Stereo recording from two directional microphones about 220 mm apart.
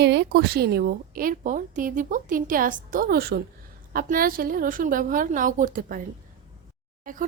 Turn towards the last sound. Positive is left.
turn(degrees=-35)  # may be behind; listen again after turning